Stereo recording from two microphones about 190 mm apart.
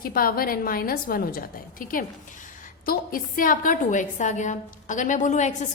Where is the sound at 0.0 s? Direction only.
50° left (ahead or behind).